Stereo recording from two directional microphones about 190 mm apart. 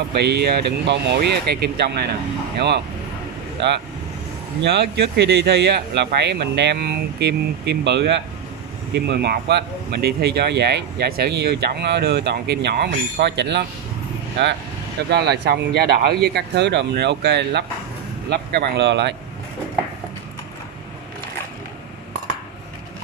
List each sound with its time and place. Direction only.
0.1 s speech: 60° right (ahead or behind)
4.6 s speech: 60° right (ahead or behind)
15.0 s speech: 60° right (ahead or behind)